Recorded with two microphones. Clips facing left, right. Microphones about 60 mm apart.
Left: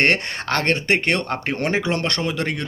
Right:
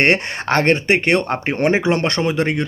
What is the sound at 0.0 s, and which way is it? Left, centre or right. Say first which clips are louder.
Speech: right 3 dB; centre.